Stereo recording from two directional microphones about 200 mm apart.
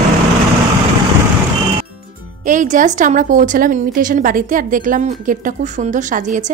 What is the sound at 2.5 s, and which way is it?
A woman's voice, 40° right (ahead or behind).